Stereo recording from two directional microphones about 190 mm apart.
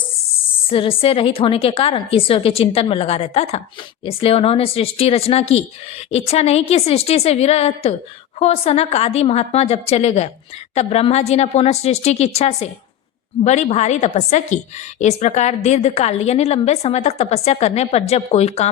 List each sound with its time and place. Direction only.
0.7 s a woman's voice: 30° left (ahead or behind)